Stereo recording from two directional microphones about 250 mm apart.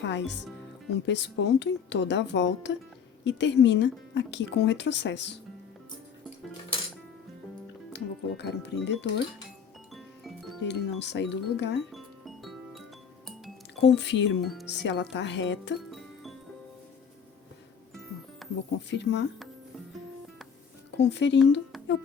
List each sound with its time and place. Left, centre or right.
0.0 s speech: left
7.9 s speech: left
9.9 s music: centre
10.6 s speech: left
11.9 s music: centre
13.8 s speech: left
18.4 s music: centre
18.9 s speech: left
20.9 s speech: left